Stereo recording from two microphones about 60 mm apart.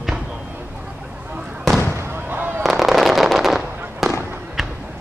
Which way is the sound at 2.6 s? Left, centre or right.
Centre.